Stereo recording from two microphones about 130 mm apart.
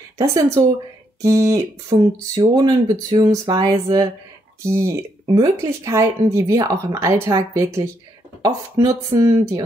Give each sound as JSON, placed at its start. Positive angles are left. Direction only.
{"t": 0.2, "sound": "speech", "side_deg": -25}